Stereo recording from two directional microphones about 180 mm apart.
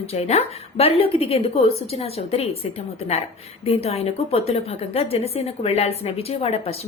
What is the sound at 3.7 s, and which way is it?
A woman's voice, 35° left (ahead or behind).